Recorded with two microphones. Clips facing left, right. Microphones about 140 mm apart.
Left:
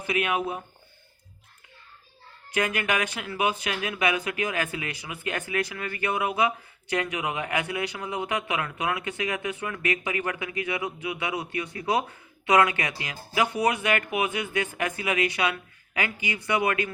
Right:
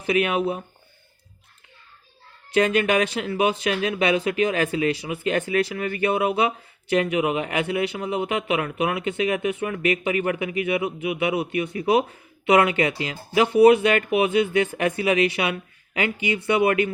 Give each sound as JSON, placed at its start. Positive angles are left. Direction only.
{"t": 0.1, "sound": "a man's voice", "side_deg": -25}
{"t": 2.5, "sound": "a man's voice", "side_deg": -30}